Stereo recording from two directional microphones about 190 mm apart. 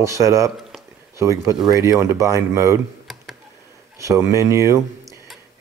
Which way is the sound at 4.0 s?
15° right (ahead or behind).